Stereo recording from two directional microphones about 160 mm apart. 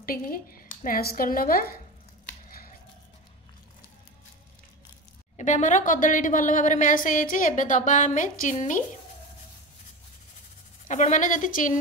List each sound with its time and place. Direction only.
0.0 s a woman's voice: 65° left (ahead or behind)
5.4 s a woman's voice: 50° left (ahead or behind)
10.9 s a woman's voice: 50° left (ahead or behind)